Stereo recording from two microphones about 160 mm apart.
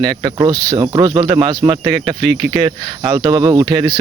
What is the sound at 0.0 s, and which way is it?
Speech, 25° right (ahead or behind).